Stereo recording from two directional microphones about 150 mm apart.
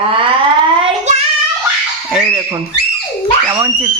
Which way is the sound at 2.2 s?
25° right (ahead or behind).